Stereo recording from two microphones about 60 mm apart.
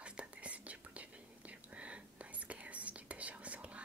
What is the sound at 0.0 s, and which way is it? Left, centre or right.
Whispering, centre.